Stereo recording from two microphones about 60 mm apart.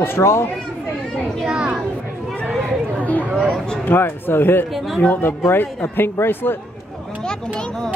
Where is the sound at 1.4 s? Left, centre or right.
Centre.